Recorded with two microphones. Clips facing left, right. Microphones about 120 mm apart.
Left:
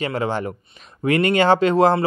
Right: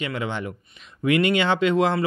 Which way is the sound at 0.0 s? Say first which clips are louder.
Left 5 dB; 40° left (ahead or behind).